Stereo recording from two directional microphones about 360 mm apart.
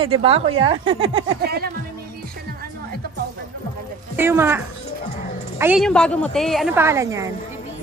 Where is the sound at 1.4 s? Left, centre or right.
Right.